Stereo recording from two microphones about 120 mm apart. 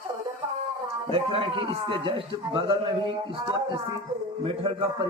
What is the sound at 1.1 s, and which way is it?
A man's voice, 50° right (ahead or behind).